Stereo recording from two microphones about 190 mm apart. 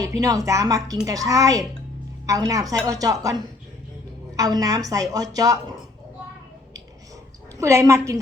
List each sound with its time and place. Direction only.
0.0 s a woman's voice: 20° right (ahead or behind)
7.6 s a woman's voice: 15° right (ahead or behind)